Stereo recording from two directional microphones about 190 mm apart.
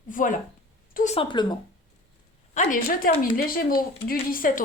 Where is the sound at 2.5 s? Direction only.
40° left (ahead or behind).